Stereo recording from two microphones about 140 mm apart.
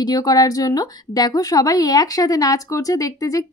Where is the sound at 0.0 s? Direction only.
25° left (ahead or behind).